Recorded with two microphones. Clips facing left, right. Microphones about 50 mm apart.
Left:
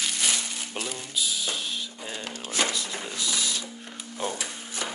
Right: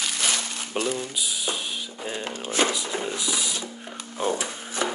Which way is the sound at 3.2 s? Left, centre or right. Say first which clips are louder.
Right 1 dB; centre.